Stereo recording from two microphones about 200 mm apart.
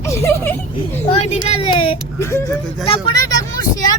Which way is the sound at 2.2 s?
15° left (ahead or behind).